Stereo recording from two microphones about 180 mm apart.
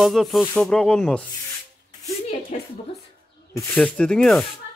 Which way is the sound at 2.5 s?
40° left (ahead or behind).